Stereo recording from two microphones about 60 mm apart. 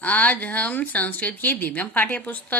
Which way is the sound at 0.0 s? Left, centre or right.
Left.